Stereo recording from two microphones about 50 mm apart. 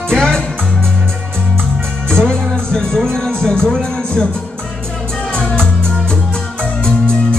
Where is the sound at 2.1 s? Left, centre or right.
Centre.